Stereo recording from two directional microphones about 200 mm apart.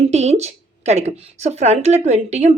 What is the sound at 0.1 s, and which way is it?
A woman's voice, 35° right (ahead or behind).